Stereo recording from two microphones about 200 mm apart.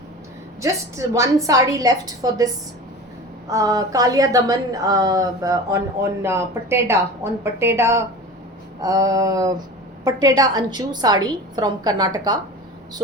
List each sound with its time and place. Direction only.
0.6 s a woman's voice: 15° right (ahead or behind)
3.5 s a woman's voice: 15° right (ahead or behind)